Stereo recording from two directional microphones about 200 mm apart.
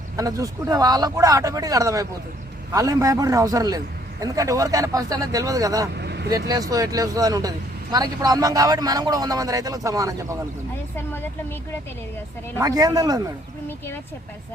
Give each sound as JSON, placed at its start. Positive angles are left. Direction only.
{"t": 0.2, "sound": "a man's voice", "side_deg": -15}
{"t": 6.0, "sound": "vehicle", "side_deg": -55}
{"t": 6.5, "sound": "a man's voice", "side_deg": -20}
{"t": 10.9, "sound": "speech", "side_deg": 10}
{"t": 12.5, "sound": "a man's voice", "side_deg": -15}
{"t": 13.7, "sound": "speech", "side_deg": 10}